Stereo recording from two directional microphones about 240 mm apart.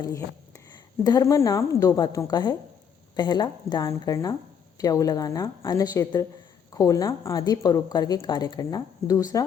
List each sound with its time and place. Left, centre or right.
0.0 s a woman's voice: centre